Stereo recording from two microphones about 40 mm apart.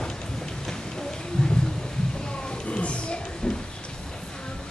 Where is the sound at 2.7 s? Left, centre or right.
Left.